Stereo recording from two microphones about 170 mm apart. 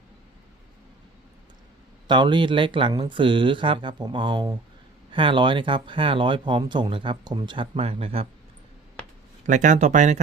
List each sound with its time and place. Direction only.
2.0 s speech: 30° right (ahead or behind)
9.5 s speech: 45° right (ahead or behind)